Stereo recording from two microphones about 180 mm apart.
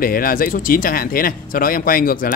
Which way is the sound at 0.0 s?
55° left (ahead or behind).